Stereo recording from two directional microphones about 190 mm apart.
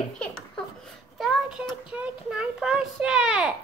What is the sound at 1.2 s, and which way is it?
Child singing, centre (ahead or behind).